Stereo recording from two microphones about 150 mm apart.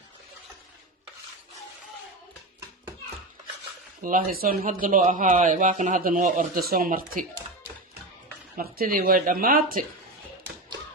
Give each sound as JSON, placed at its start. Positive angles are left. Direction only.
{"t": 4.0, "sound": "speech", "side_deg": -70}
{"t": 8.5, "sound": "speech", "side_deg": -70}